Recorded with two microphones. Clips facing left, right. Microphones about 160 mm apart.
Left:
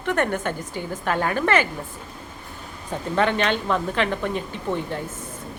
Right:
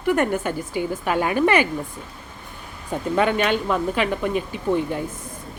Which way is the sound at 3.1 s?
10° right (ahead or behind).